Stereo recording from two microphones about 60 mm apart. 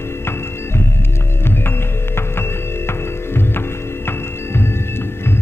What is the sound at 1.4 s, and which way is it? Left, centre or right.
Music, left.